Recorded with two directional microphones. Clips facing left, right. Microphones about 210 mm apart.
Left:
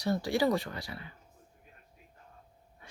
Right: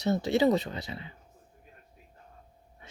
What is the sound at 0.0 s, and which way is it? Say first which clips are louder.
Speech: right 4 dB; 20° right (ahead or behind).